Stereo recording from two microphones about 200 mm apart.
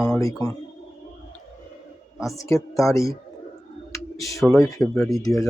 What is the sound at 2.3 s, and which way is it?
Speech, 15° left (ahead or behind).